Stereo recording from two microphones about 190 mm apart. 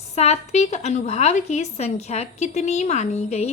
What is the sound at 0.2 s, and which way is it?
A woman's voice, 35° left (ahead or behind).